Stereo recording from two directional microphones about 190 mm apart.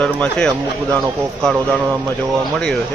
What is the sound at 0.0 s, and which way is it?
Speech, 5° left (ahead or behind).